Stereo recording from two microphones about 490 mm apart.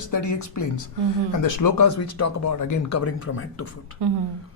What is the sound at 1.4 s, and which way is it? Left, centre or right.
Speech, left.